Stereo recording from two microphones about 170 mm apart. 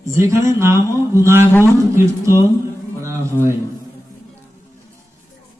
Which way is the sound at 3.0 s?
15° right (ahead or behind).